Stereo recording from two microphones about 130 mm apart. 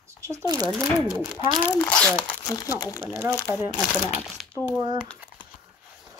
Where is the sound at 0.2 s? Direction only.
20° right (ahead or behind).